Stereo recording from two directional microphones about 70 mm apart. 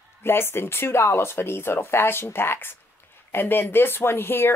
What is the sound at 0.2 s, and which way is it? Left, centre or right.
Speech, left.